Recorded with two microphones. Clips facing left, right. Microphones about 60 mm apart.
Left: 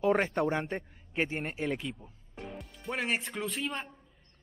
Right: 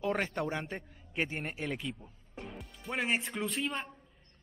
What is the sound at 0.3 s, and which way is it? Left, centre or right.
A man's voice, centre.